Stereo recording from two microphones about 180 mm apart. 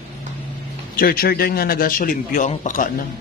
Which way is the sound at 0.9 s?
55° left (ahead or behind).